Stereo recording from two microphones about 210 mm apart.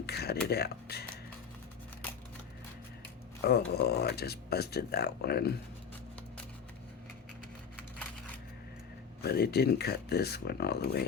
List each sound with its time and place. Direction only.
0.0 s a sound: 50° left (ahead or behind)
0.4 s speech: 50° left (ahead or behind)
3.4 s speech: 50° left (ahead or behind)
9.2 s speech: 50° left (ahead or behind)